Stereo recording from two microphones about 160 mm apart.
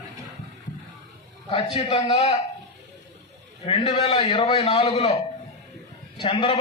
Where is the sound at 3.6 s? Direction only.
40° left (ahead or behind).